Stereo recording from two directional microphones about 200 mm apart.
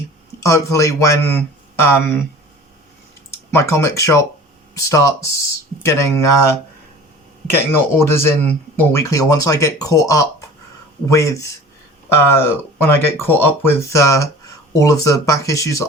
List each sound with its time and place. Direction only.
0.3 s speech: 15° left (ahead or behind)
3.3 s speech: 15° left (ahead or behind)
7.9 s speech: 10° left (ahead or behind)